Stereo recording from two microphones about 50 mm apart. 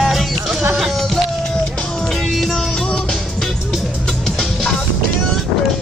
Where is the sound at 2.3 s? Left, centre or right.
Centre.